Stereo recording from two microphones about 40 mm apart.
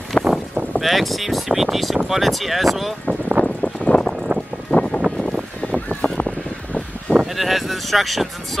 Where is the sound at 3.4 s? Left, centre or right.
Left.